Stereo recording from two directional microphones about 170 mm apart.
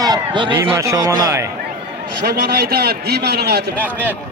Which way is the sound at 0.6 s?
15° right (ahead or behind).